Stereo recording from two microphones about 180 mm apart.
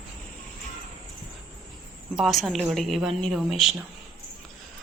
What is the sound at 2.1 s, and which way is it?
A woman's voice, centre (ahead or behind).